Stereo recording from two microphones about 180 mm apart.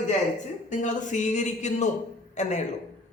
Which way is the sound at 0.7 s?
45° left (ahead or behind).